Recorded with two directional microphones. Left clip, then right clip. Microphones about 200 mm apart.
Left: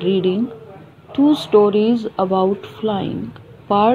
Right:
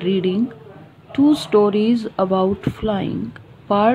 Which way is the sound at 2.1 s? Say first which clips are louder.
Left 1 dB; 20° right (ahead or behind).